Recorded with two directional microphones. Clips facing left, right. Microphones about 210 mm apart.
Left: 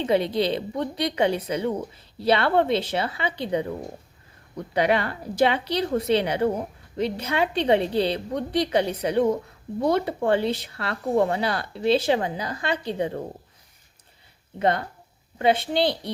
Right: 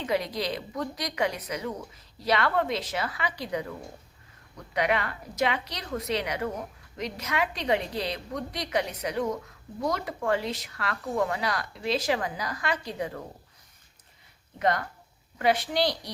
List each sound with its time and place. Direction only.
0.0 s a woman's voice: 25° left (ahead or behind)
14.6 s a woman's voice: 25° left (ahead or behind)